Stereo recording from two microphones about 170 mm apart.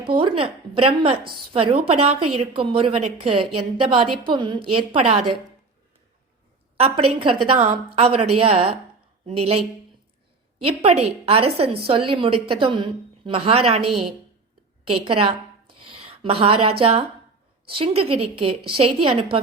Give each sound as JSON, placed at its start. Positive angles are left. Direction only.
{"t": 0.0, "sound": "a woman's voice", "side_deg": -30}
{"t": 6.7, "sound": "a woman's voice", "side_deg": -35}
{"t": 10.8, "sound": "a woman's voice", "side_deg": -40}